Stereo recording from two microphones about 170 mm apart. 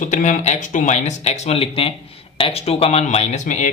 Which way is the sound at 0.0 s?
45° left (ahead or behind).